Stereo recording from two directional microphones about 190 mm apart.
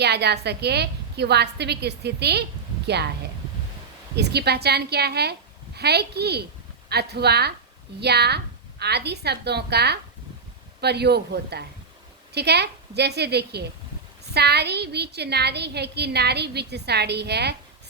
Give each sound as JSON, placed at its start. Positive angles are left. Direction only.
{"t": 0.0, "sound": "a woman's voice", "side_deg": -60}
{"t": 4.1, "sound": "a woman's voice", "side_deg": -60}